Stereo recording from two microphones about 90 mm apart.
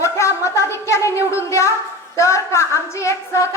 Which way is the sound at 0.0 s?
35° left (ahead or behind).